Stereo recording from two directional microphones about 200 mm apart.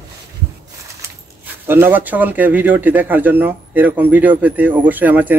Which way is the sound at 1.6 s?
10° right (ahead or behind).